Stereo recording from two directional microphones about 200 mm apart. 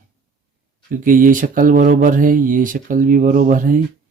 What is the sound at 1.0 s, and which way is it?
Speech, 40° right (ahead or behind).